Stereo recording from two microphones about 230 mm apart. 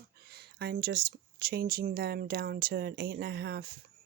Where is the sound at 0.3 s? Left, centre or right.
Right.